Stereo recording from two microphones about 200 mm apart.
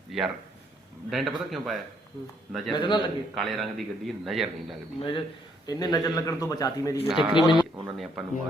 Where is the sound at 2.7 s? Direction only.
25° left (ahead or behind).